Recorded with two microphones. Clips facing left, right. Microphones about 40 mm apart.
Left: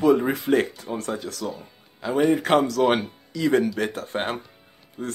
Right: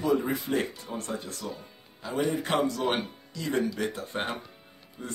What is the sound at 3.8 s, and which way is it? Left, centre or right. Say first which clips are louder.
Speech: left 4 dB; left.